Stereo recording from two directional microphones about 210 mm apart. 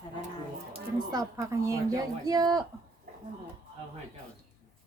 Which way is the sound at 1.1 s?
15° right (ahead or behind).